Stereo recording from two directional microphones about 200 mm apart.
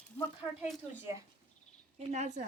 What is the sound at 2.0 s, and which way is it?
Speech, 35° right (ahead or behind).